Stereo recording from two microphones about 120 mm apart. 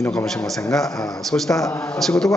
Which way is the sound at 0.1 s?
5° left (ahead or behind).